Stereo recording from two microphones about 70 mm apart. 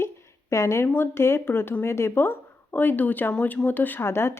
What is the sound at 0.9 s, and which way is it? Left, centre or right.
A woman's voice, left.